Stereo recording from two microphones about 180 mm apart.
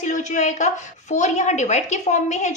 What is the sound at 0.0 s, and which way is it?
A woman's voice, 45° left (ahead or behind).